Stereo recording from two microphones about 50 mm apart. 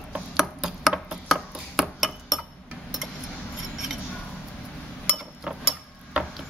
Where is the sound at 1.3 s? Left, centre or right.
Centre.